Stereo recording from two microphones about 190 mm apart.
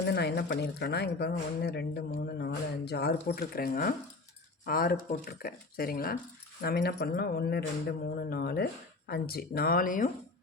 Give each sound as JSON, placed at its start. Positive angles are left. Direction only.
{"t": 0.0, "sound": "a woman's voice", "side_deg": 60}